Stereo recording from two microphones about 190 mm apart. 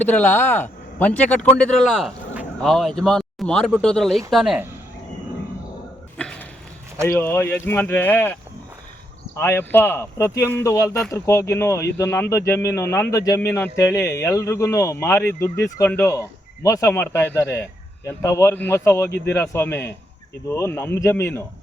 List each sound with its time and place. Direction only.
0.0 s a man's voice: 10° left (ahead or behind)
6.1 s cough: 5° left (ahead or behind)
7.2 s speech: 10° left (ahead or behind)
9.4 s speech: 10° left (ahead or behind)
10.8 s speech: centre (ahead or behind)
11.1 s speech: 15° left (ahead or behind)